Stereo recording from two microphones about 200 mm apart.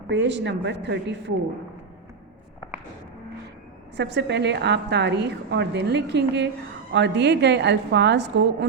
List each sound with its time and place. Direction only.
0.1 s a woman's voice: 60° right (ahead or behind)
3.9 s a woman's voice: 60° right (ahead or behind)